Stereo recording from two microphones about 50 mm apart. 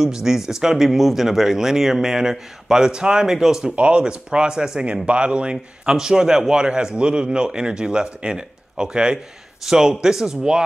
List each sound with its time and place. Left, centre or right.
0.0 s speech: centre
3.6 s speech: right